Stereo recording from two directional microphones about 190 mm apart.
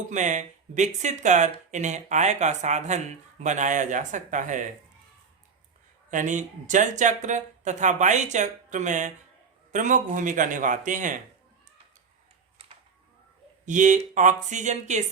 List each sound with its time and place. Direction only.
0.1 s speech: 40° right (ahead or behind)
6.1 s a man's voice: 40° right (ahead or behind)
13.7 s speech: 40° right (ahead or behind)